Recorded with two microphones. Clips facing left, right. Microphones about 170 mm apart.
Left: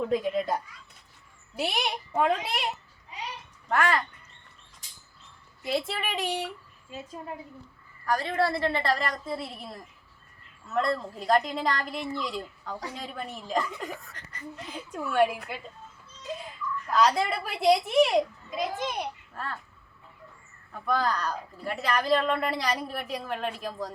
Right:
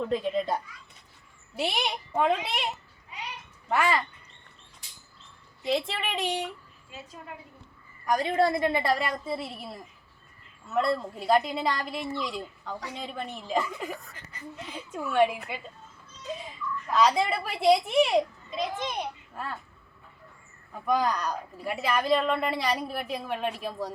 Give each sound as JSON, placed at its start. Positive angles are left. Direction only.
{"t": 0.0, "sound": "speech", "side_deg": 5}
{"t": 5.6, "sound": "speech", "side_deg": 0}
{"t": 6.9, "sound": "a woman's voice", "side_deg": 40}
{"t": 8.0, "sound": "a woman's voice", "side_deg": -20}
{"t": 19.3, "sound": "a child's voice", "side_deg": -10}
{"t": 20.7, "sound": "speech", "side_deg": -15}